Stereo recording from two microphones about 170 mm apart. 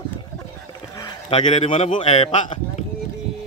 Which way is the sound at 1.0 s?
30° left (ahead or behind).